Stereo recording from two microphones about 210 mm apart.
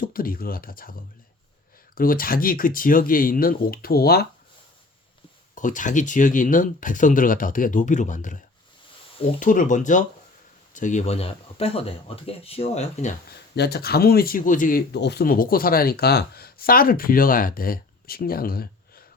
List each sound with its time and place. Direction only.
0.0 s speech: 45° left (ahead or behind)
2.0 s speech: 45° left (ahead or behind)
5.5 s speech: 40° left (ahead or behind)
9.4 s speech: 40° left (ahead or behind)
13.6 s speech: 50° left (ahead or behind)